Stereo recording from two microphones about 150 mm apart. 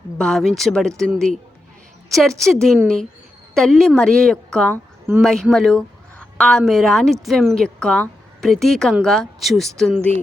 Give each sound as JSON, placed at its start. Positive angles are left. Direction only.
{"t": 0.2, "sound": "a woman's voice", "side_deg": 5}
{"t": 2.4, "sound": "a woman's voice", "side_deg": 5}